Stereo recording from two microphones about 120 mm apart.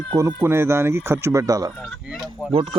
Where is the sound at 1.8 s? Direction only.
Centre (ahead or behind).